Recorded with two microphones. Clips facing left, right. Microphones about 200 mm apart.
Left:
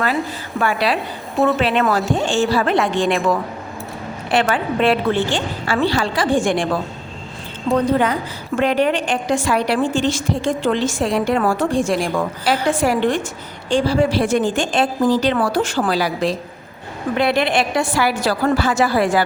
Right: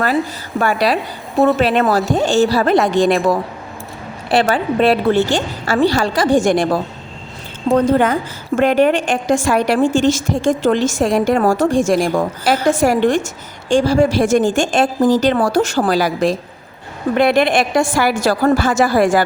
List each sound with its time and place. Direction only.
0.6 s a woman's voice: 40° right (ahead or behind)
7.9 s a woman's voice: 50° right (ahead or behind)